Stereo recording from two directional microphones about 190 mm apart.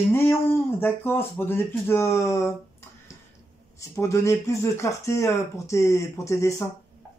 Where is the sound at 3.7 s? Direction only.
15° left (ahead or behind).